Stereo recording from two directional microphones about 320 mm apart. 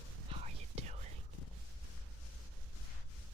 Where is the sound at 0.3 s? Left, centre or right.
Centre.